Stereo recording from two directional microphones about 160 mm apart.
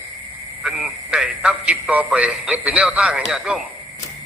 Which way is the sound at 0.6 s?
5° right (ahead or behind).